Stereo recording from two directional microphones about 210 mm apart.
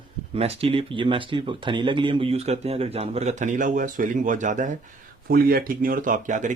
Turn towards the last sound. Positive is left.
turn(degrees=-35)  # may be behind; listen again after turning